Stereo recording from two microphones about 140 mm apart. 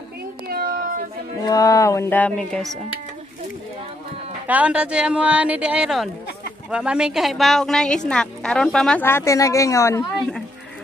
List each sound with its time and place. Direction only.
0.5 s cat: 90° right
1.4 s speech: 25° left (ahead or behind); by 2.7 s 5° left (ahead or behind)
4.5 s a woman's voice: 10° right (ahead or behind)
9.0 s speech: 20° left (ahead or behind)